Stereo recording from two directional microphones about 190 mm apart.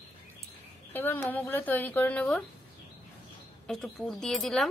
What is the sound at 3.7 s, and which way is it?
Speech, 5° left (ahead or behind).